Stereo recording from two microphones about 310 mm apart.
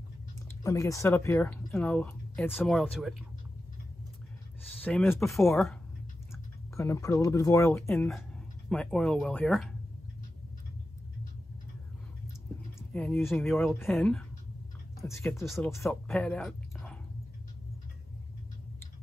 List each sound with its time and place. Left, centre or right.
0.7 s speech: centre
4.8 s speech: centre
12.9 s speech: centre